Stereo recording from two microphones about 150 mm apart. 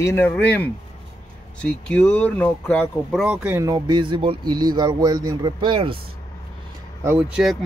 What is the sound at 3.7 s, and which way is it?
Speech, 30° right (ahead or behind).